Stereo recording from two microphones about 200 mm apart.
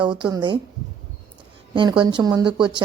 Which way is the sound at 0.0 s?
25° right (ahead or behind).